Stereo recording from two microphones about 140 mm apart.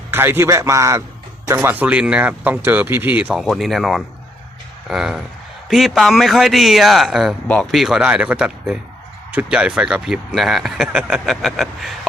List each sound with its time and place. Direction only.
0.1 s a man's voice: 15° right (ahead or behind)
3.4 s speech: centre (ahead or behind)
7.4 s speech: 10° left (ahead or behind)
7.7 s speech: centre (ahead or behind)